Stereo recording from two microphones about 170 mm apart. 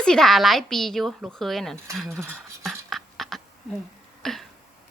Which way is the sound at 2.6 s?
Centre (ahead or behind).